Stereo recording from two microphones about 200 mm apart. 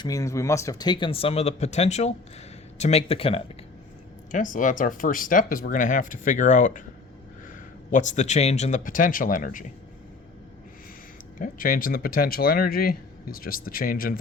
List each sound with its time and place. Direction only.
0.0 s speech: 15° left (ahead or behind)
4.3 s speech: 40° left (ahead or behind)
7.9 s speech: 35° left (ahead or behind)
11.3 s speech: 45° left (ahead or behind)